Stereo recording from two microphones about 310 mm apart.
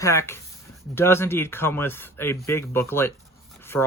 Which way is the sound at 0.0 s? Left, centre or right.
Centre.